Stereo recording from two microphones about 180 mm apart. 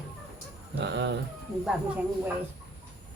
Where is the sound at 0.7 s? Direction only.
75° right (ahead or behind).